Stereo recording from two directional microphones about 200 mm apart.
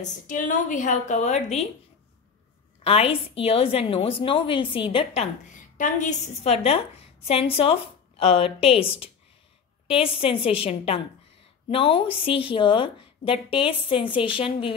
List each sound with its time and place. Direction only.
0.0 s a woman's voice: 40° left (ahead or behind)
2.8 s a woman's voice: 30° left (ahead or behind)
9.8 s a woman's voice: 25° left (ahead or behind)